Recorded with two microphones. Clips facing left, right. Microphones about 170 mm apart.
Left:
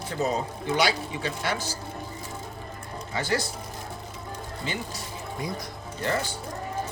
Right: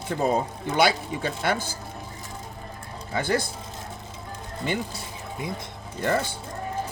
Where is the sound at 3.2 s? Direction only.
55° right (ahead or behind).